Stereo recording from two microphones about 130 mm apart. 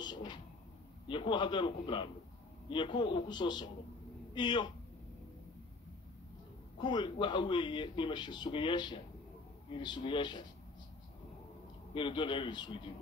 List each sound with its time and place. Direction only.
0.0 s a sound: 35° left (ahead or behind)
1.0 s a man's voice: 40° left (ahead or behind)
6.8 s a man's voice: 35° left (ahead or behind)
11.9 s a man's voice: 40° left (ahead or behind)